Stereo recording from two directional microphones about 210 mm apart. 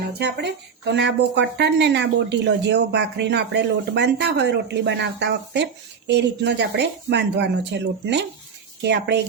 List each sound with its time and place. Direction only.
0.2 s speech: 55° right (ahead or behind)